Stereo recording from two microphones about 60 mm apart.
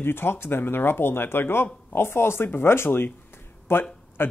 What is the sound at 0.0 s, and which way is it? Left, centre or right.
Speech, left.